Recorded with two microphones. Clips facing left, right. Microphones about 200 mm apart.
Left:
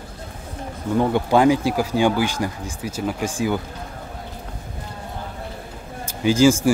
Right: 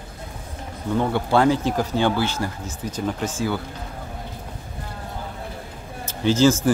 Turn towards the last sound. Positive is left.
turn(degrees=10)  # may be behind; listen again after turning